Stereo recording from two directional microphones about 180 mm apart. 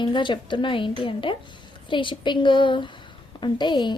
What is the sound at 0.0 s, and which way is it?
A woman's voice, 25° left (ahead or behind).